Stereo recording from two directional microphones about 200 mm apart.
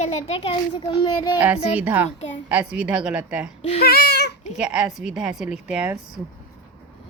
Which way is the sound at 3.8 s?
50° left (ahead or behind).